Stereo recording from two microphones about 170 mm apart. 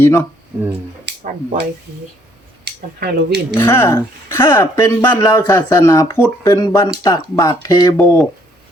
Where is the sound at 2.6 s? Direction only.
80° right.